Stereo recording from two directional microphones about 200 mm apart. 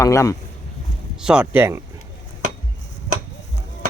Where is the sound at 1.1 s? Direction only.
5° right (ahead or behind).